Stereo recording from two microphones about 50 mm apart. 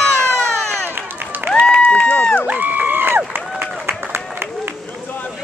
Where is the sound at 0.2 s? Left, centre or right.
Right.